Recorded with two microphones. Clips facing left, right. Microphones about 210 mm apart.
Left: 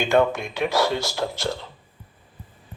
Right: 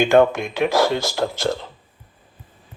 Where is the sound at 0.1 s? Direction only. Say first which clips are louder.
Right 5 dB; 50° right (ahead or behind).